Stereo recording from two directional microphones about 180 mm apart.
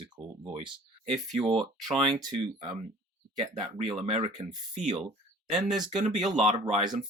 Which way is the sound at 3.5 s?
30° right (ahead or behind).